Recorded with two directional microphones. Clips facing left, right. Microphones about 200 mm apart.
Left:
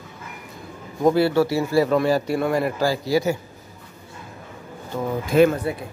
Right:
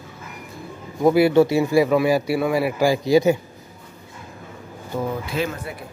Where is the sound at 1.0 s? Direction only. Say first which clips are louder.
Right 3 dB; 10° right (ahead or behind).